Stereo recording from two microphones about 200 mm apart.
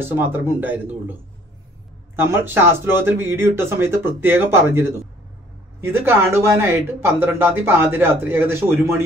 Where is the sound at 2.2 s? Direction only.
10° right (ahead or behind).